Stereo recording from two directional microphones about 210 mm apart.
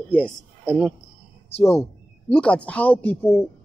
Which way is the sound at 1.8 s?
5° left (ahead or behind).